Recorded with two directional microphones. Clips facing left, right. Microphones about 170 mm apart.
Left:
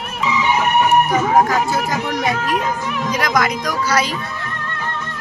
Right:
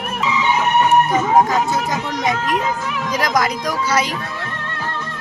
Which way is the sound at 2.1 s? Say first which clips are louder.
Right 1 dB; 20° right (ahead or behind).